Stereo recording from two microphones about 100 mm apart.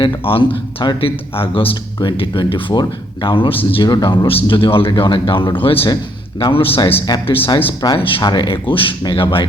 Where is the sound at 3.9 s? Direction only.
45° left (ahead or behind); by 5.9 s 65° left (ahead or behind).